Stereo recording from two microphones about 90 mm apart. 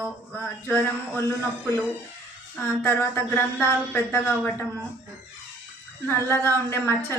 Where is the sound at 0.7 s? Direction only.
25° left (ahead or behind).